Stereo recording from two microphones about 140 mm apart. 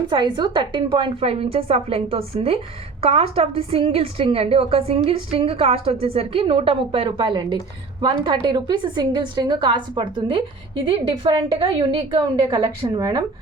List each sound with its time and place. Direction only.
0.1 s a woman's voice: 35° right (ahead or behind)
12.2 s a woman's voice: 25° right (ahead or behind)